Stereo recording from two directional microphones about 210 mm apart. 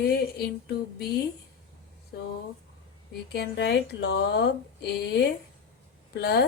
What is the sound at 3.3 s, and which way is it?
Speech, 55° left (ahead or behind).